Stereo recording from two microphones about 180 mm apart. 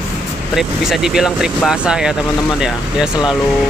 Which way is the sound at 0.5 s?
Centre (ahead or behind).